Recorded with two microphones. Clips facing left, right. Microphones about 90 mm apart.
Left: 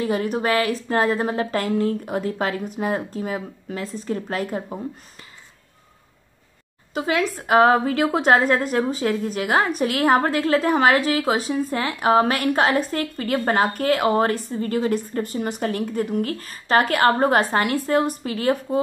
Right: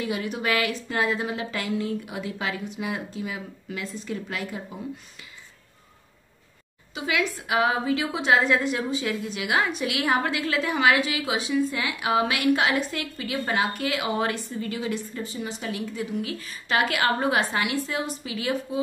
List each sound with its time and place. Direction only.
0.0 s a woman's voice: 40° left (ahead or behind)
6.9 s a woman's voice: 40° left (ahead or behind)